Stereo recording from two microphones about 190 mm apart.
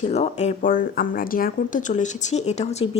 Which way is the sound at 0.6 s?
45° left (ahead or behind).